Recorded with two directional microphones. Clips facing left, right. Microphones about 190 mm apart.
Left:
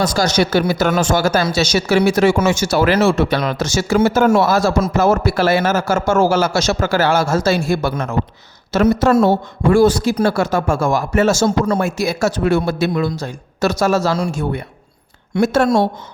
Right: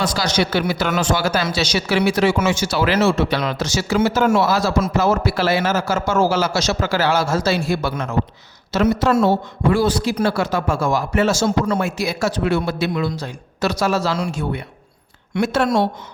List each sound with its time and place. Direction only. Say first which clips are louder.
0.0 s speech: left 4 dB; 45° left (ahead or behind)